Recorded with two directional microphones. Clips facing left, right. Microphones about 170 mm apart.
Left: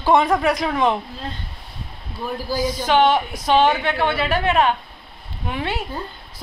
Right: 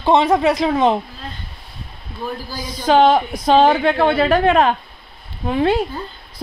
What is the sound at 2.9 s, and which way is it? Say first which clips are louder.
A woman's voice: right 5 dB; 30° right (ahead or behind).